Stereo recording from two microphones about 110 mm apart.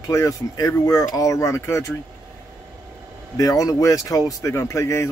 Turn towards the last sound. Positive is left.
turn(degrees=25)  # may be behind; listen again after turning